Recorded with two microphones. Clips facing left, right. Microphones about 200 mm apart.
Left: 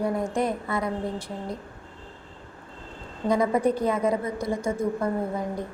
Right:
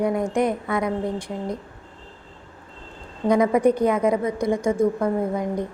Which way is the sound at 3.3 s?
15° right (ahead or behind).